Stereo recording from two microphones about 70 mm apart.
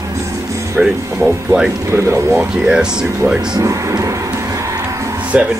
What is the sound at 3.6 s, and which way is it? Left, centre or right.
Speech, right.